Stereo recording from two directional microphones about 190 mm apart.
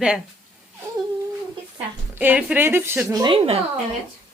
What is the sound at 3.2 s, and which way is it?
Speech, 30° right (ahead or behind).